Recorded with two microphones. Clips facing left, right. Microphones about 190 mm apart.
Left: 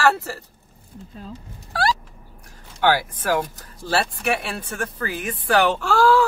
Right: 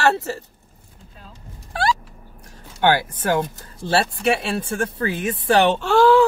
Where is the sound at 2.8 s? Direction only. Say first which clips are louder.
Right 1 dB; 20° right (ahead or behind).